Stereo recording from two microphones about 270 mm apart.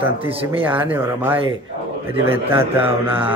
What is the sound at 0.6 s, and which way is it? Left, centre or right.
A man's voice, centre.